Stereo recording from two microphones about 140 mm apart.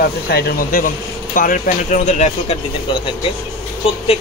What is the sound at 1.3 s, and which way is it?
Speech, 75° left (ahead or behind).